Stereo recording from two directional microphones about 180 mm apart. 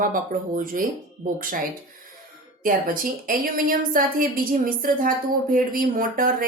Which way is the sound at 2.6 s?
50° right (ahead or behind).